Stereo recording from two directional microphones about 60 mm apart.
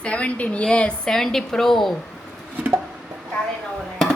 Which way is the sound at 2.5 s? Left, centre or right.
Right.